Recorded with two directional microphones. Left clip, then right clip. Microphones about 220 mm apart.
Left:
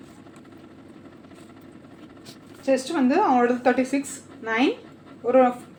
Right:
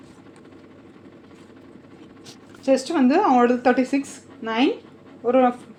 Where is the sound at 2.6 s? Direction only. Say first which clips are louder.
Right 3 dB; 40° right (ahead or behind).